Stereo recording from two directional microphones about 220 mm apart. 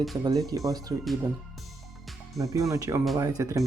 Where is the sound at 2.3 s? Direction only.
15° right (ahead or behind).